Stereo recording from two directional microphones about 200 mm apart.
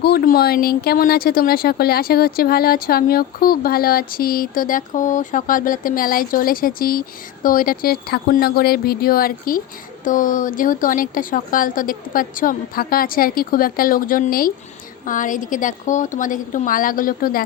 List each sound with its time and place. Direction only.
0.0 s a woman's voice: 50° left (ahead or behind)